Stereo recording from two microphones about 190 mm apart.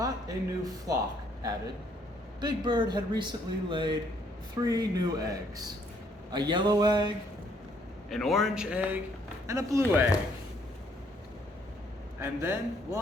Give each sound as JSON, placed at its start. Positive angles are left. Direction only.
{"t": 0.0, "sound": "speech", "side_deg": -20}
{"t": 2.4, "sound": "a man's voice", "side_deg": -20}
{"t": 8.1, "sound": "a man's voice", "side_deg": 0}
{"t": 12.2, "sound": "a man's voice", "side_deg": -10}